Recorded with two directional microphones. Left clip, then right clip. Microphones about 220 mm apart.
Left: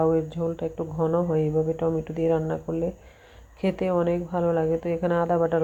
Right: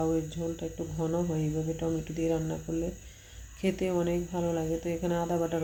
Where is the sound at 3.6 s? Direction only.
5° left (ahead or behind).